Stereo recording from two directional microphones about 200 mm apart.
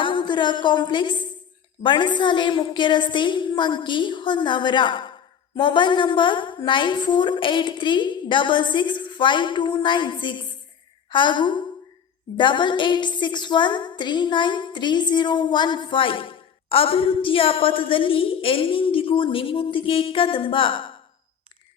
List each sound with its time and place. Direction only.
0.0 s a woman's voice: 25° left (ahead or behind)